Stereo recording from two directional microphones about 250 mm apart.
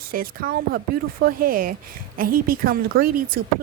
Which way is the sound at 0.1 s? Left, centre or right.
Right.